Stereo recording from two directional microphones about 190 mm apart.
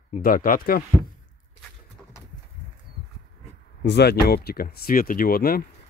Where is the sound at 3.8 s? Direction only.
65° left (ahead or behind).